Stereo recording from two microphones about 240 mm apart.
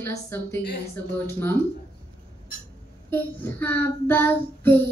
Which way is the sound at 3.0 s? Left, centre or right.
Centre.